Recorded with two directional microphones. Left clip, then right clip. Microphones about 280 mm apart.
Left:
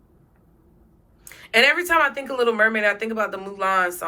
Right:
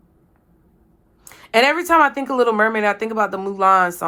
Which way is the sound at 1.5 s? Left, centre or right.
Centre.